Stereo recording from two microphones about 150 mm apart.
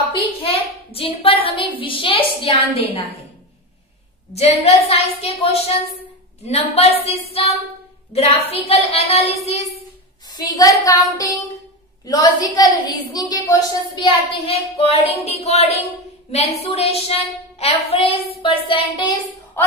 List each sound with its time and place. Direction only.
0.1 s a sound: 40° left (ahead or behind)
1.8 s a woman's voice: 35° left (ahead or behind)
4.3 s speech: 45° left (ahead or behind)
10.2 s a woman's voice: 25° left (ahead or behind)